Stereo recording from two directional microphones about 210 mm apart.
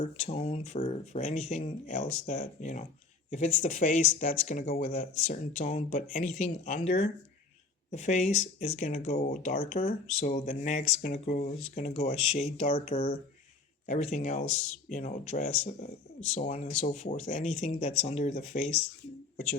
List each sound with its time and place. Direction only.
0.0 s speech: 30° left (ahead or behind)